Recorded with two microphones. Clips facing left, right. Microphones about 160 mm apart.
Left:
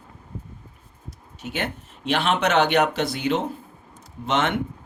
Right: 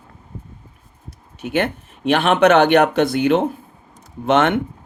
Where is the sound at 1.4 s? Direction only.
60° right (ahead or behind).